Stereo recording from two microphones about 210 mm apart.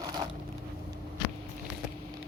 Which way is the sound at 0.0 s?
20° right (ahead or behind).